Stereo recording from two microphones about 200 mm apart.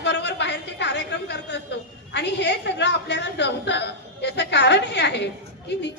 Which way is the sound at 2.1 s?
60° left (ahead or behind).